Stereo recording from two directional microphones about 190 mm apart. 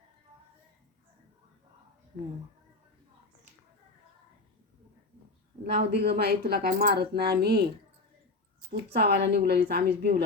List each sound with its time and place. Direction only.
5.6 s a woman's voice: 60° right (ahead or behind)
8.7 s a woman's voice: 60° right (ahead or behind)